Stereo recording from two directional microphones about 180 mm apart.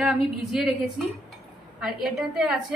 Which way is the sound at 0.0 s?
Centre (ahead or behind).